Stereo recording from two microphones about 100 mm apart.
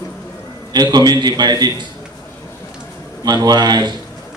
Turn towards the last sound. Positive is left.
turn(degrees=-45)  # may be behind; listen again after turning